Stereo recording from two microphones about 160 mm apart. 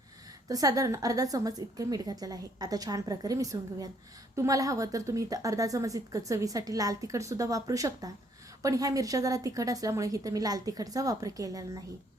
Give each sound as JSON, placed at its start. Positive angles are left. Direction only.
{"t": 0.4, "sound": "a woman's voice", "side_deg": -20}